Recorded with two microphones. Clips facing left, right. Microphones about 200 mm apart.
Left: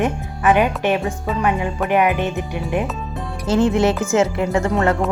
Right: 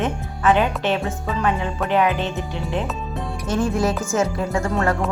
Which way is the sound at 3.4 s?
25° left (ahead or behind).